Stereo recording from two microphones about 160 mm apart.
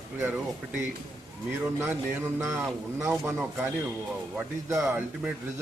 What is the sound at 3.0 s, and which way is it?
Speech, 15° right (ahead or behind).